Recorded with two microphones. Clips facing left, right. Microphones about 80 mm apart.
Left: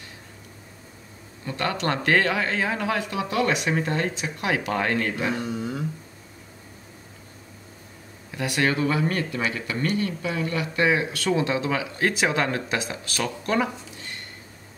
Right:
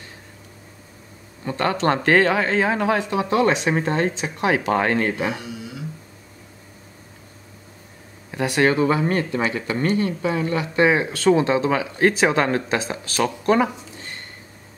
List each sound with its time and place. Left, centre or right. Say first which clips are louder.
1.4 s speech: right 6 dB; right
5.5 s dog: left 5 dB; left
8.3 s speech: right 5 dB; right